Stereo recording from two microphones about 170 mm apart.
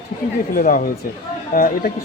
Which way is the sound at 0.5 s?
55° left (ahead or behind).